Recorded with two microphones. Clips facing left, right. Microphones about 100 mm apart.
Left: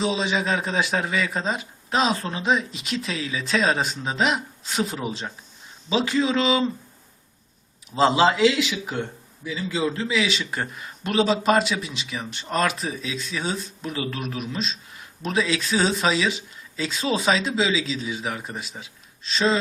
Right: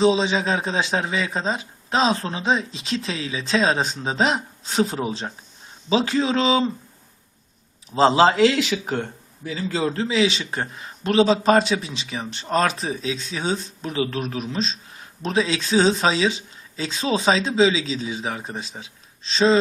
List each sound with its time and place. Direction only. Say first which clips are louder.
0.0 s a man's voice: right 5 dB; 30° right (ahead or behind)
7.9 s a man's voice: right 3 dB; 35° right (ahead or behind); by 10.0 s 50° right (ahead or behind)
10.0 s a man's voice: right 3 dB; 30° right (ahead or behind)